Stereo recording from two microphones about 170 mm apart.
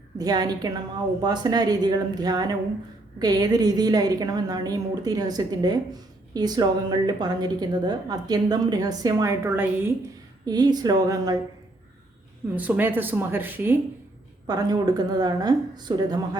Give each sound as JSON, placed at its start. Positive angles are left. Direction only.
{"t": 0.2, "sound": "a woman's voice", "side_deg": -25}
{"t": 12.5, "sound": "speech", "side_deg": -10}
{"t": 14.4, "sound": "a woman's voice", "side_deg": -25}